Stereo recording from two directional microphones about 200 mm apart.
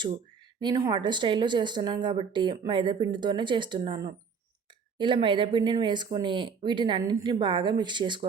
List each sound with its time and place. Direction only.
0.6 s speech: 20° right (ahead or behind)